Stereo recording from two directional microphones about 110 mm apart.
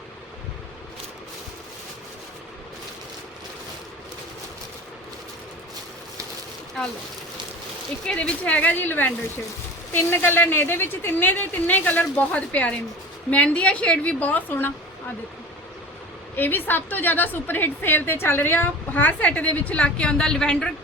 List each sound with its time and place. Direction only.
8.0 s a woman's voice: 10° left (ahead or behind)
16.3 s a woman's voice: 20° left (ahead or behind)